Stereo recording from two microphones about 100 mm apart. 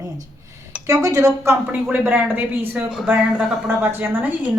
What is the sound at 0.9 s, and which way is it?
Speech, 35° right (ahead or behind).